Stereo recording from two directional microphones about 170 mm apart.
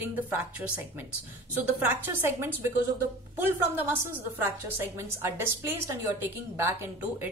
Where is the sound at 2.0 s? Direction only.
15° right (ahead or behind).